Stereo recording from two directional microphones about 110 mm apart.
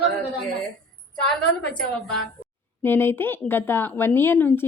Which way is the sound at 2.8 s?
20° left (ahead or behind).